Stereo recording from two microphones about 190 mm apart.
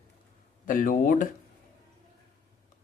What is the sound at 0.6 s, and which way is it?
Speech, 45° left (ahead or behind).